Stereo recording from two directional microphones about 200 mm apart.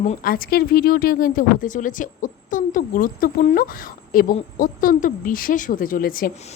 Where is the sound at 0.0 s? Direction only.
40° left (ahead or behind).